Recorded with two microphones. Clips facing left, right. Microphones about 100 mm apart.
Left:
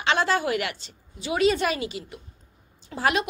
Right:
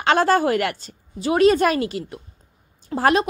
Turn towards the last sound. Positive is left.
turn(degrees=-40)  # may be behind; listen again after turning